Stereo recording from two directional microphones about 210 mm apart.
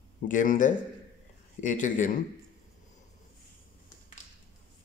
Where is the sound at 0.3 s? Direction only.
40° left (ahead or behind).